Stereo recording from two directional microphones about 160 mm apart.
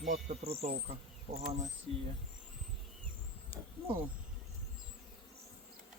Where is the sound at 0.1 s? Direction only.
40° right (ahead or behind).